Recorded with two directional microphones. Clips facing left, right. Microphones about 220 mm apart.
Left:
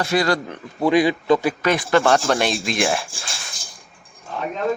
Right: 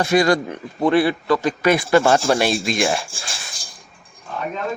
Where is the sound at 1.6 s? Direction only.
10° right (ahead or behind).